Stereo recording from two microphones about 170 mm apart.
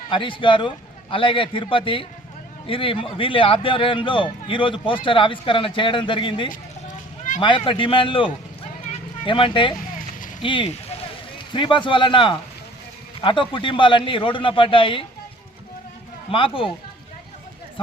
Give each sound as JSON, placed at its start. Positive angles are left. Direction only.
{"t": 0.1, "sound": "a man's voice", "side_deg": 30}
{"t": 6.5, "sound": "a sound", "side_deg": 50}
{"t": 7.4, "sound": "a man's voice", "side_deg": 30}
{"t": 16.3, "sound": "a man's voice", "side_deg": 30}